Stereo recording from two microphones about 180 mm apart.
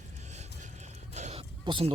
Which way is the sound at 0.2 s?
40° right (ahead or behind).